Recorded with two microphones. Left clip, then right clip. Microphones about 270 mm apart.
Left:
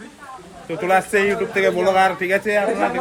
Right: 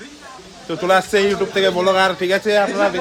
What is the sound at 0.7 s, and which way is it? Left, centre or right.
Speech, centre.